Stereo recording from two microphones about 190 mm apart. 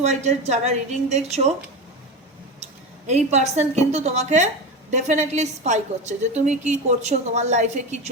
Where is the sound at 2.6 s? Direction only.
35° right (ahead or behind).